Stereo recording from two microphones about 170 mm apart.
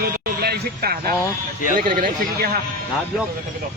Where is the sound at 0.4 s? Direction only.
65° right (ahead or behind).